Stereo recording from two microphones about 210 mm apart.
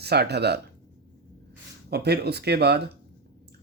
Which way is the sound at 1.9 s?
50° right (ahead or behind).